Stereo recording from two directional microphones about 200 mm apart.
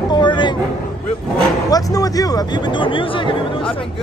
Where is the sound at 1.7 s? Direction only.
20° left (ahead or behind).